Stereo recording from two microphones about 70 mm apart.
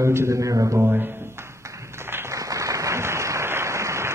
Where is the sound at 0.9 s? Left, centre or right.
Right.